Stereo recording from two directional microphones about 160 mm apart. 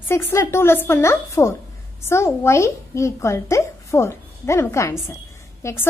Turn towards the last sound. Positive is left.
turn(degrees=15)  # may be behind; listen again after turning